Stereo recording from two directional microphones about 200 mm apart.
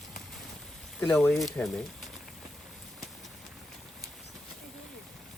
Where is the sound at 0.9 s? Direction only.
10° left (ahead or behind).